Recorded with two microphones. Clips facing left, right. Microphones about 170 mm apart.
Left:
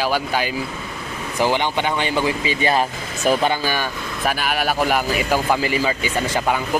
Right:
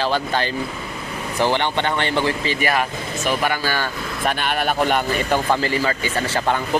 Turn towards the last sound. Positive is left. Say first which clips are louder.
# left 1 dB
turn(degrees=15)  # may be behind; listen again after turning